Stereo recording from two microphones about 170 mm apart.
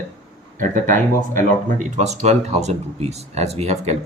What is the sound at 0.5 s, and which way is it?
Speech, 50° right (ahead or behind).